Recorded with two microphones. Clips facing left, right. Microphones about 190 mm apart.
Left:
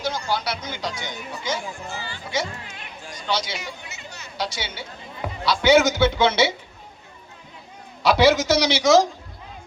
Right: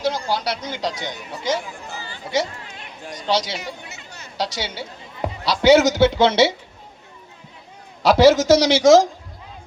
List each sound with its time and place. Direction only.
0.0 s speech: 35° right (ahead or behind)
8.0 s a man's voice: 40° right (ahead or behind)